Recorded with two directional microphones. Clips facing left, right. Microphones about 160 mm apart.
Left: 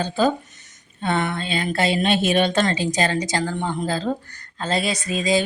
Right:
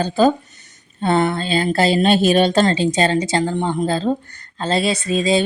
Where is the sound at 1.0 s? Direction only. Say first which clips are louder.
Right 6 dB; 30° right (ahead or behind).